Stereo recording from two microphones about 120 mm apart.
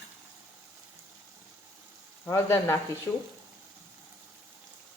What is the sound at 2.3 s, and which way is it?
Speech, 20° left (ahead or behind).